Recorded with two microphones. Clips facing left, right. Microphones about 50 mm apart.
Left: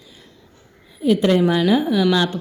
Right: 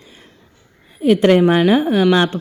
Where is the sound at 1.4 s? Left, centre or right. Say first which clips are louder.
Right 4 dB; right.